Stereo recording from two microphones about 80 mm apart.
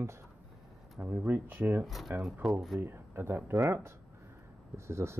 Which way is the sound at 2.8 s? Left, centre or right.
Right.